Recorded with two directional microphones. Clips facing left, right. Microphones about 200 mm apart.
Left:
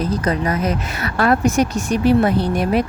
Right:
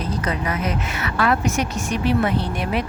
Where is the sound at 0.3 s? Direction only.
40° left (ahead or behind).